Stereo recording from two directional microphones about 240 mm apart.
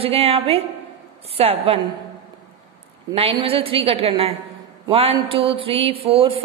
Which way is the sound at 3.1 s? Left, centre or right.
Right.